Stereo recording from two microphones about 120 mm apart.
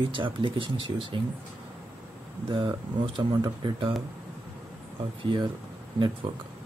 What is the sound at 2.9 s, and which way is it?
Speech, 40° right (ahead or behind).